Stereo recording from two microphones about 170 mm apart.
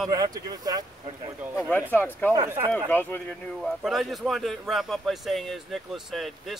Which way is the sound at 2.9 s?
10° left (ahead or behind).